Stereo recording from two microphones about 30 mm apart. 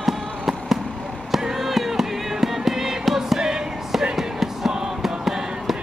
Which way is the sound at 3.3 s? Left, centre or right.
Right.